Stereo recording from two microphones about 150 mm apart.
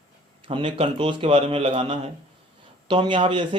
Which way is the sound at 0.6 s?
40° right (ahead or behind).